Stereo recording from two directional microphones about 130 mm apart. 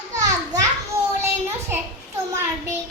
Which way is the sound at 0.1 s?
25° right (ahead or behind).